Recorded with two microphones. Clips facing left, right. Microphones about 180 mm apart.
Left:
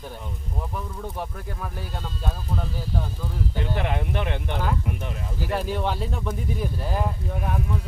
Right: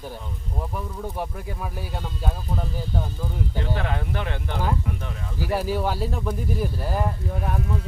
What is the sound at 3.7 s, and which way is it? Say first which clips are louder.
Speech: left 1 dB; 15° left (ahead or behind).